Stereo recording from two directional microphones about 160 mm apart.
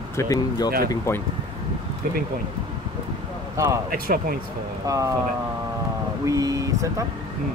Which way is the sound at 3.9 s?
65° right (ahead or behind).